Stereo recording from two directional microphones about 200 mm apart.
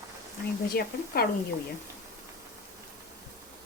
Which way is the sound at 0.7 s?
50° left (ahead or behind).